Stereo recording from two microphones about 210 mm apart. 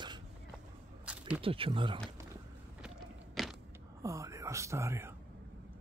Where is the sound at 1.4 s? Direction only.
25° right (ahead or behind).